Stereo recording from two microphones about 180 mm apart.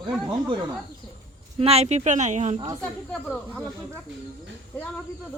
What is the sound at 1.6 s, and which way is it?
Speech, 35° right (ahead or behind).